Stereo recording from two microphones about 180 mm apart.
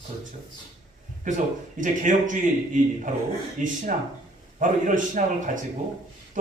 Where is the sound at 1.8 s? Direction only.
45° right (ahead or behind).